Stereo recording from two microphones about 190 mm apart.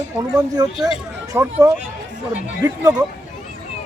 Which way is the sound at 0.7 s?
Centre (ahead or behind).